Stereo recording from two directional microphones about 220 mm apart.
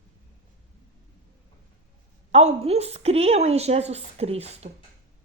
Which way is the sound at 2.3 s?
30° right (ahead or behind).